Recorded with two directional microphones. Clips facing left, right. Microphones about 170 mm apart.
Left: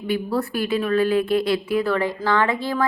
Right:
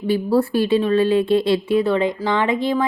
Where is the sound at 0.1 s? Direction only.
30° right (ahead or behind).